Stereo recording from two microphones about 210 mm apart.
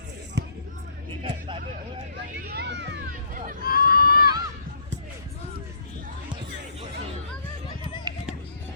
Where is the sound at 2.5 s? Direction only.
55° right (ahead or behind).